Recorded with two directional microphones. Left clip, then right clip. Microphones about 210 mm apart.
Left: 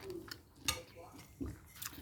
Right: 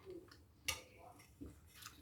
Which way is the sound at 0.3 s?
45° left (ahead or behind).